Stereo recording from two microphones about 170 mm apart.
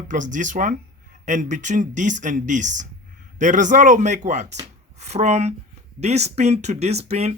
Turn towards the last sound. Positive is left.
turn(degrees=-40)  # may be behind; listen again after turning